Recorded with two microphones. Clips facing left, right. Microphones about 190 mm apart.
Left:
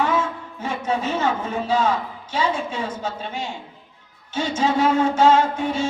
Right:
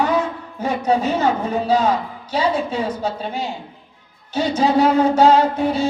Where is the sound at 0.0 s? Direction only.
40° right (ahead or behind).